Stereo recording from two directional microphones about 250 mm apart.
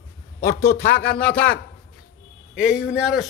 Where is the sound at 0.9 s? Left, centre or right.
Centre.